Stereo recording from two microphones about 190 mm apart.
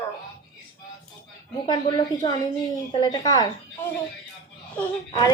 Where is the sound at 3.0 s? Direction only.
20° left (ahead or behind).